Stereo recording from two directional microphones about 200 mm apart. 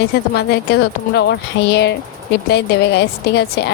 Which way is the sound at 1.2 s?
60° left (ahead or behind).